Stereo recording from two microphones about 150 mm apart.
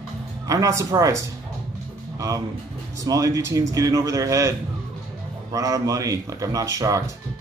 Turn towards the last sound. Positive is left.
turn(degrees=-20)  # may be behind; listen again after turning